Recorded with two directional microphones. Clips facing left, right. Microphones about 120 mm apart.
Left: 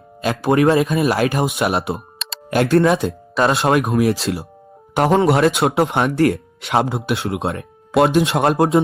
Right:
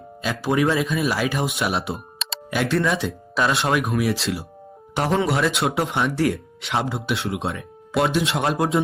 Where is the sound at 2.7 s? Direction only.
50° left (ahead or behind).